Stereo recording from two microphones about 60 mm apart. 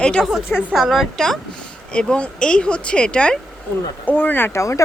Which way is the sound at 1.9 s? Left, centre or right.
Centre.